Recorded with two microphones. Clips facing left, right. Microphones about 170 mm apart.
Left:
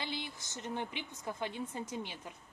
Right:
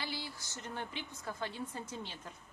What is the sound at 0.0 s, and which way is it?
A woman's voice, 20° left (ahead or behind).